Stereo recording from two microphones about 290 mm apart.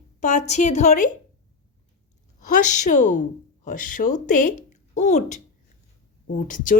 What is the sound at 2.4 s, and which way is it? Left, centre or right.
A woman's voice, left.